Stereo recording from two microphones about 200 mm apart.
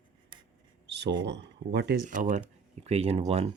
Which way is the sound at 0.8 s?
60° right (ahead or behind).